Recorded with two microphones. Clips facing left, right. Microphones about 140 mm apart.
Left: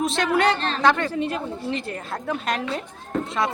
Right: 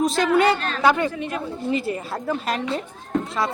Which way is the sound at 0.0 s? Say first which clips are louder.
Right 3 dB; centre (ahead or behind).